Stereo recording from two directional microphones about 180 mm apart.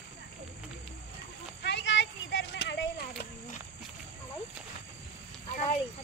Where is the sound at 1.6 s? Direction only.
75° left (ahead or behind).